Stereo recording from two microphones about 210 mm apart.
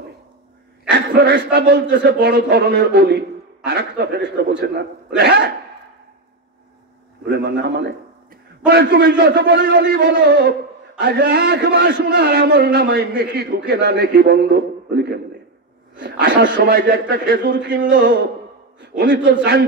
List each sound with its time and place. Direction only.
0.8 s a man's voice: 50° right (ahead or behind)
7.2 s a man's voice: 55° right (ahead or behind)
16.0 s a man's voice: 55° right (ahead or behind)